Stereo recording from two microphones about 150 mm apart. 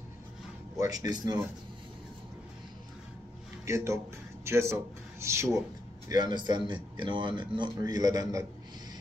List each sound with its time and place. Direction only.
0.7 s speech: 25° right (ahead or behind)
3.6 s a man's voice: 20° right (ahead or behind)